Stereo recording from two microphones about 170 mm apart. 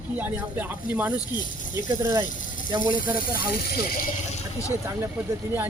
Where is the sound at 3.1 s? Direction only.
60° left (ahead or behind).